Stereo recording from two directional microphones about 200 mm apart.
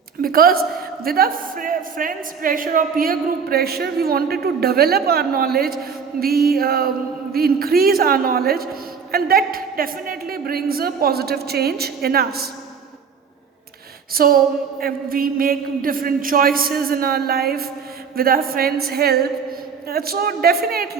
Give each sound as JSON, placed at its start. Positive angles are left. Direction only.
{"t": 0.2, "sound": "a woman's voice", "side_deg": -50}
{"t": 14.1, "sound": "a woman's voice", "side_deg": -45}